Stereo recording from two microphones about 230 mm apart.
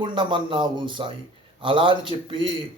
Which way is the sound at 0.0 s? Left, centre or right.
Right.